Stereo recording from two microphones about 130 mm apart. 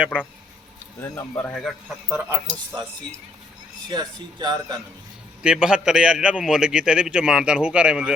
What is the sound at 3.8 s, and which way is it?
Speech, 35° right (ahead or behind).